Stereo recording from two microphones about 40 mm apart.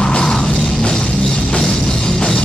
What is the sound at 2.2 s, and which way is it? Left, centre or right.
Music, centre.